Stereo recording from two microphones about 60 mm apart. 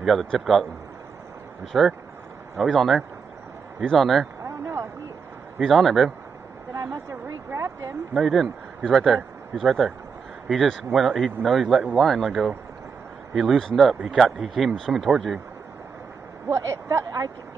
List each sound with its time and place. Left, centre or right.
0.0 s a man's voice: centre
4.4 s a sound: right
5.6 s speech: centre
6.7 s a sound: right
8.1 s speech: centre
16.4 s speech: right